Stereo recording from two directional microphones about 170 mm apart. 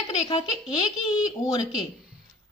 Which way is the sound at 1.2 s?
25° left (ahead or behind).